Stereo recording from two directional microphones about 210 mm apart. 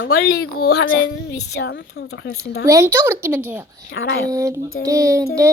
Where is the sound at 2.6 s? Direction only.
15° right (ahead or behind).